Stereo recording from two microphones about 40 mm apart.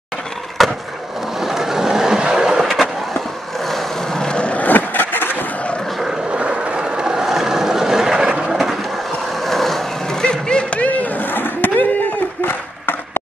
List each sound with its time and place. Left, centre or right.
0.6 s skateboard: centre
1.4 s vehicle: centre
3.6 s vehicle: centre
4.2 s skateboard: left
4.6 s vehicle: left
6.6 s vehicle: right
9.5 s vehicle: centre
10.2 s a sound: left
10.8 s a sound: left
11.3 s a sound: left